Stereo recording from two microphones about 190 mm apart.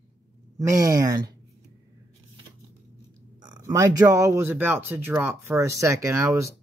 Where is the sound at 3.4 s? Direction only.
20° right (ahead or behind).